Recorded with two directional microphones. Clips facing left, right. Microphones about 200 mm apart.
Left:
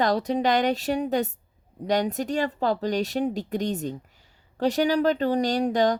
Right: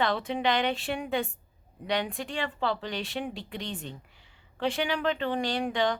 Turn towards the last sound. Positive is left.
turn(degrees=40)  # may be behind; listen again after turning